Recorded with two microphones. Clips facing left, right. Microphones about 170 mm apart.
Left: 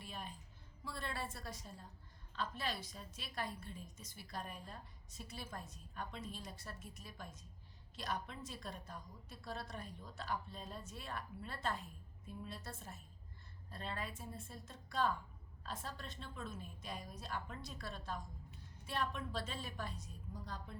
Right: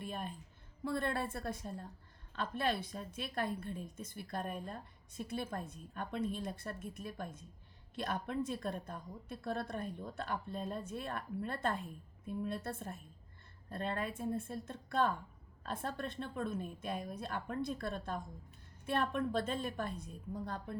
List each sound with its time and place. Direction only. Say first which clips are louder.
0.0 s music: right 7 dB; 55° right (ahead or behind)
0.9 s a woman's voice: right 9 dB; 55° right (ahead or behind)